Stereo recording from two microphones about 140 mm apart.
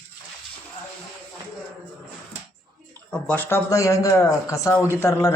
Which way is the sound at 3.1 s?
10° left (ahead or behind).